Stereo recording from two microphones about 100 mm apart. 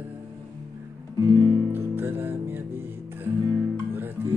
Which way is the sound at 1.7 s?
20° right (ahead or behind).